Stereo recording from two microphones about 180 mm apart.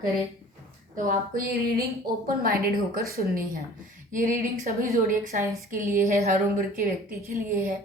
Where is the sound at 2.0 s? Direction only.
55° right (ahead or behind).